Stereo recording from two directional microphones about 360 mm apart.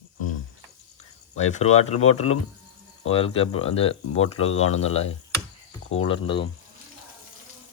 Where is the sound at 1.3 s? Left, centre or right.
Centre.